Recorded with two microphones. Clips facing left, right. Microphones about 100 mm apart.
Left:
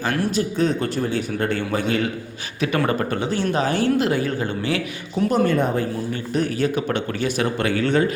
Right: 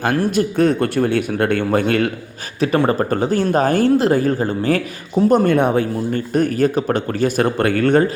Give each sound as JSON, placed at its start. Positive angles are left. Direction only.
{"t": 0.0, "sound": "speech", "side_deg": -50}
{"t": 2.6, "sound": "speech", "side_deg": -30}
{"t": 5.5, "sound": "speech", "side_deg": -60}
{"t": 6.3, "sound": "speech", "side_deg": -45}